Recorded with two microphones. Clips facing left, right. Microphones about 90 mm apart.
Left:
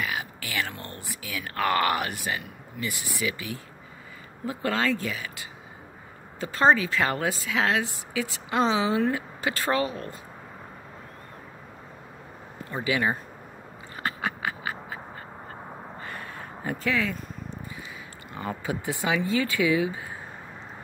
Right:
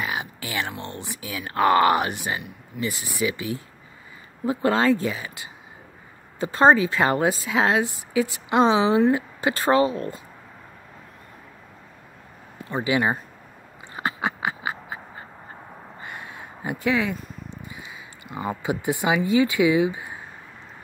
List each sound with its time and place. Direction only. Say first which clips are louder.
0.0 s a woman's voice: right 2 dB; 25° right (ahead or behind)
12.7 s a woman's voice: right 4 dB; 25° right (ahead or behind)
13.9 s a sound: right 4 dB; 20° right (ahead or behind)
18.3 s speech: right 4 dB; 15° right (ahead or behind)